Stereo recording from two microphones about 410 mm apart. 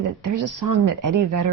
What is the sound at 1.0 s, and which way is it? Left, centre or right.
Speech, right.